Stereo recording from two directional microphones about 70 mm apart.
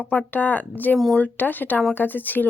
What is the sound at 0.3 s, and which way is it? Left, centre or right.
Speech, left.